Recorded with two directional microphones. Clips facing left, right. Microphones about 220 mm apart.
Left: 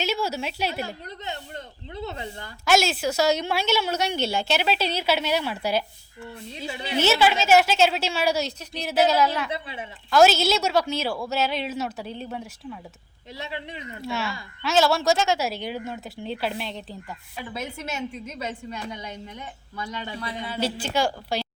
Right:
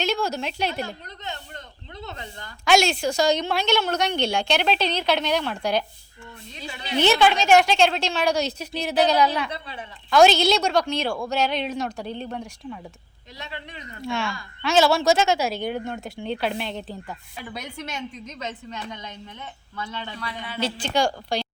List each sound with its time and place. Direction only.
0.0 s a woman's voice: 5° left (ahead or behind)
2.6 s a woman's voice: 5° left (ahead or behind)
6.2 s speech: 25° left (ahead or behind)
7.0 s a woman's voice: 5° left (ahead or behind)
9.5 s speech: 20° left (ahead or behind)
10.1 s a woman's voice: 5° left (ahead or behind)
13.7 s speech: 25° left (ahead or behind)
14.0 s a woman's voice: 5° left (ahead or behind)
20.1 s speech: 25° left (ahead or behind)
20.6 s a woman's voice: 10° left (ahead or behind)